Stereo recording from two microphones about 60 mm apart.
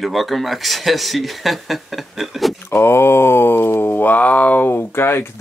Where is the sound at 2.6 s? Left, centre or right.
Left.